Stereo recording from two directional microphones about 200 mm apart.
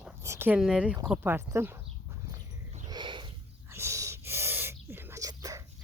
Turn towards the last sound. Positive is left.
turn(degrees=-15)  # may be behind; listen again after turning